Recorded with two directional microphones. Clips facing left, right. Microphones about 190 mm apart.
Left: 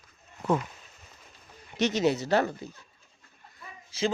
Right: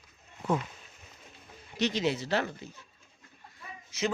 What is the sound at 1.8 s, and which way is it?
Speech, 40° left (ahead or behind).